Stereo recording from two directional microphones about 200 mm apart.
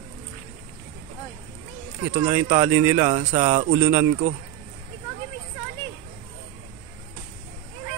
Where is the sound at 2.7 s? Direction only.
10° right (ahead or behind).